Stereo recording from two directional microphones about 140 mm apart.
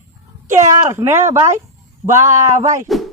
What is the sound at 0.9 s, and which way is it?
A man's voice, 15° right (ahead or behind).